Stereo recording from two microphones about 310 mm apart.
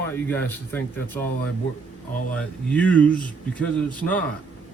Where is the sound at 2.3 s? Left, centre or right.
Centre.